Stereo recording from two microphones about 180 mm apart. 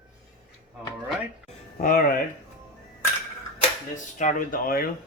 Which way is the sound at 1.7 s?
55° left (ahead or behind).